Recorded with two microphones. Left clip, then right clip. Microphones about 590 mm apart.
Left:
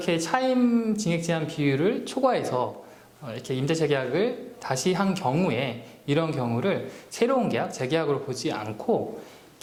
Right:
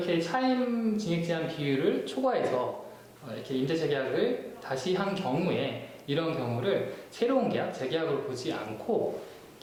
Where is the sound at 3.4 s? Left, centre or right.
Left.